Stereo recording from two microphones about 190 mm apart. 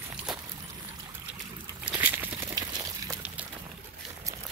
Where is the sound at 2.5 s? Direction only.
20° right (ahead or behind).